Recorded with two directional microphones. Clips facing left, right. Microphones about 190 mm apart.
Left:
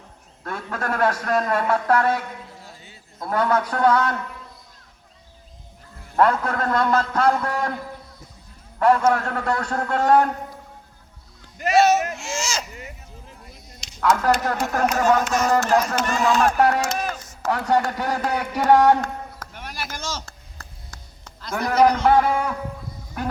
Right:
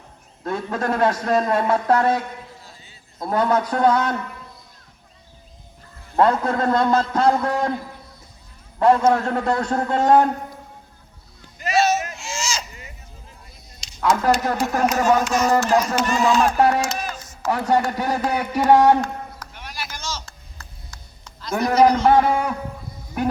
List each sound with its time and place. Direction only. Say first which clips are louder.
0.4 s a man's voice: right 5 dB; 20° right (ahead or behind)
2.6 s a sound: left 3 dB; 60° left (ahead or behind)
3.2 s speech: right 2 dB; 15° right (ahead or behind)
6.1 s a man's voice: right 2 dB; 20° right (ahead or behind)
8.8 s a man's voice: right 2 dB; 20° right (ahead or behind)
11.5 s a sound: left 3 dB; 60° left (ahead or behind)
14.0 s speech: right 1 dB; 15° right (ahead or behind)
15.2 s speech: right 1 dB; 55° left (ahead or behind)
16.0 s a sound: right 2 dB; 55° left (ahead or behind)
17.5 s speech: right 1 dB; 10° right (ahead or behind)
19.0 s a sound: right 1 dB; 50° left (ahead or behind)
21.5 s speech: right 2 dB; 15° right (ahead or behind)